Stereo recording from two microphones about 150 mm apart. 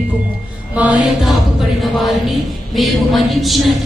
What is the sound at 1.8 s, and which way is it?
A woman's voice, centre (ahead or behind).